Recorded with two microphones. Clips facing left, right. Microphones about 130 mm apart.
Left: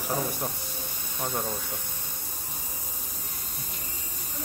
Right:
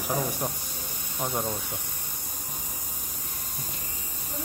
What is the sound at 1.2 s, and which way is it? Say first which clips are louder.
Speech: right 1 dB; 15° right (ahead or behind).